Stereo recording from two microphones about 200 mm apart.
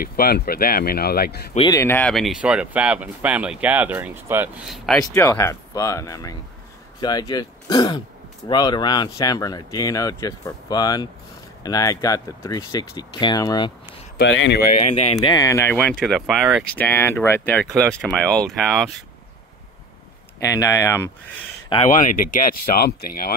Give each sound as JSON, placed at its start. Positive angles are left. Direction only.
{"t": 0.0, "sound": "speech", "side_deg": 45}
{"t": 1.7, "sound": "speech", "side_deg": 15}
{"t": 5.0, "sound": "speech", "side_deg": 15}
{"t": 14.1, "sound": "speech", "side_deg": 65}
{"t": 14.7, "sound": "speech", "side_deg": 35}
{"t": 15.1, "sound": "speech", "side_deg": 15}
{"t": 16.7, "sound": "speech", "side_deg": 10}
{"t": 20.3, "sound": "speech", "side_deg": 15}
{"t": 21.9, "sound": "speech", "side_deg": 40}